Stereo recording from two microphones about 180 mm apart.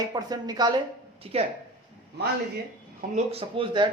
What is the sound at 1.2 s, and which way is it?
Speech, 35° right (ahead or behind).